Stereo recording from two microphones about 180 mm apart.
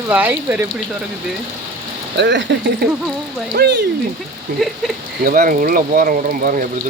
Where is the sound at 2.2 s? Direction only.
75° right (ahead or behind).